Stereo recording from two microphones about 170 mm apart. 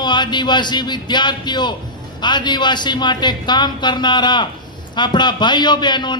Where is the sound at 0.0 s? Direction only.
25° left (ahead or behind).